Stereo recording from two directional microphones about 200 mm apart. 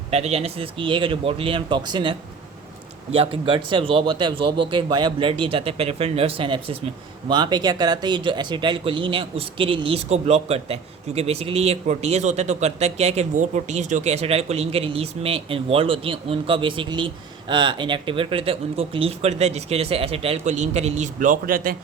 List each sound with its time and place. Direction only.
0.1 s speech: 30° right (ahead or behind)
3.2 s speech: 25° right (ahead or behind); by 21.8 s 45° right (ahead or behind)